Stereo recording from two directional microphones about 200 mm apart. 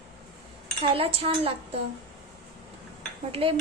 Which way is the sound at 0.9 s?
30° right (ahead or behind).